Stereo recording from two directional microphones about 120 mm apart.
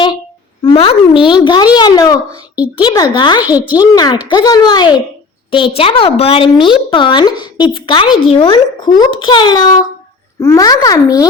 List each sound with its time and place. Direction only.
0.6 s a child's voice: 50° left (ahead or behind)
1.3 s a child's voice: 40° left (ahead or behind)
5.5 s a woman's voice: 45° left (ahead or behind); by 11.3 s 30° left (ahead or behind)